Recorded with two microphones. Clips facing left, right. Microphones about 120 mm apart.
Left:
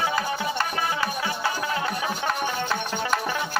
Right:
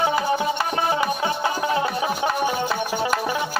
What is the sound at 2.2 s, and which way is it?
Music, 15° right (ahead or behind).